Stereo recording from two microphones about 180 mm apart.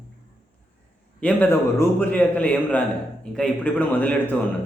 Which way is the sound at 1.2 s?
10° left (ahead or behind).